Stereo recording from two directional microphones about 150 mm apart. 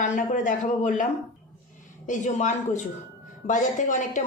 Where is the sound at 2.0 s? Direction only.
55° left (ahead or behind).